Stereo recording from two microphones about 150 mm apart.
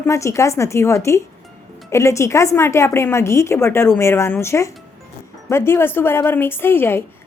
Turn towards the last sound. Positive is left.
turn(degrees=15)  # may be behind; listen again after turning